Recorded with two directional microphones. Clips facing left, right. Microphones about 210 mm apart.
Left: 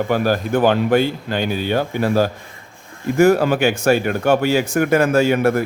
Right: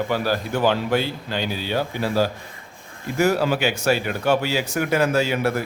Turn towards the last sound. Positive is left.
turn(degrees=50)  # may be behind; listen again after turning